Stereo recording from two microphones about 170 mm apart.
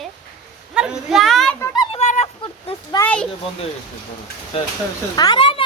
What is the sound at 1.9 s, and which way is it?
Chicken, 40° left (ahead or behind).